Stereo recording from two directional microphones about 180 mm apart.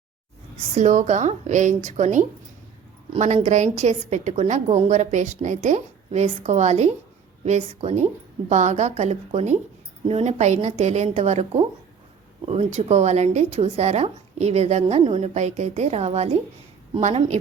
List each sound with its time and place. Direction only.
0.8 s speech: 40° right (ahead or behind)